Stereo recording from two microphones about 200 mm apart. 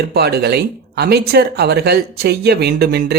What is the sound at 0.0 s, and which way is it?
Speech, 50° right (ahead or behind).